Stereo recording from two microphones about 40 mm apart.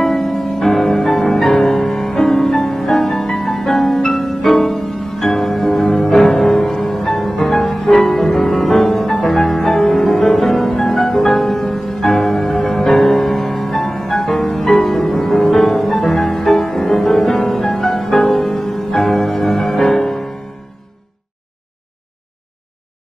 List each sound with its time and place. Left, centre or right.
0.0 s music: centre
7.6 s music: centre
7.9 s music: centre
15.3 s music: left
16.4 s music: centre
18.1 s music: left
18.9 s music: centre